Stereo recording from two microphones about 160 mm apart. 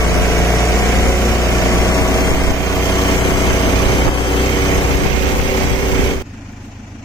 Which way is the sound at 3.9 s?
30° left (ahead or behind).